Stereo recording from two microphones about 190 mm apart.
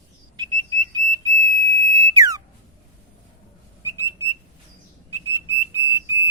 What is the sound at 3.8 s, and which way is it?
Whistling, 15° right (ahead or behind).